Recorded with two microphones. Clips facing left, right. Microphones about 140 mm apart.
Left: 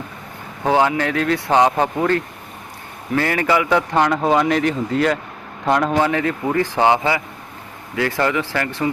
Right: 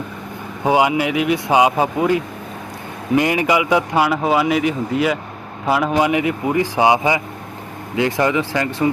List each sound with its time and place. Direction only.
0.6 s a man's voice: 10° right (ahead or behind)